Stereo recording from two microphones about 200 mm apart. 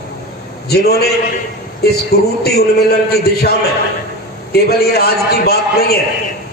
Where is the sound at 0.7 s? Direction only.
50° left (ahead or behind).